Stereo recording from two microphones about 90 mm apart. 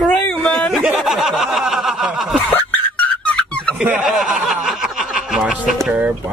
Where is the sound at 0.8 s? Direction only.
5° right (ahead or behind).